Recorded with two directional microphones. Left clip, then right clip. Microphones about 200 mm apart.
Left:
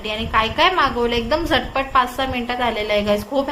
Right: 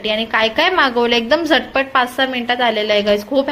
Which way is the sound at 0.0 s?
30° right (ahead or behind).